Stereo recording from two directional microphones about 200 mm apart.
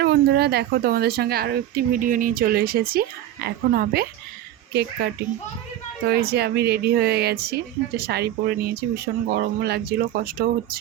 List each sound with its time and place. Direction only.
0.0 s a woman's voice: 55° right (ahead or behind)